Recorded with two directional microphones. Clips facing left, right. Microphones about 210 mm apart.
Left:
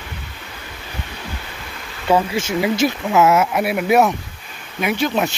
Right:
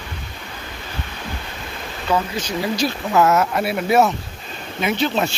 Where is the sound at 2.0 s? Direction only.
25° left (ahead or behind).